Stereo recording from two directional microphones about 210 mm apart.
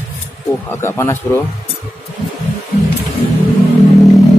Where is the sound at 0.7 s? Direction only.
10° left (ahead or behind).